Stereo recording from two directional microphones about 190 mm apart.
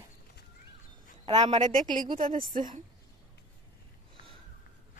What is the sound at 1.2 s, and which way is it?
Speech, 30° right (ahead or behind).